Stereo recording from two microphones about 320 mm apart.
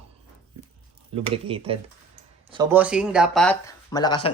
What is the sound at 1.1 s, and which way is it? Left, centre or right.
Speech, centre.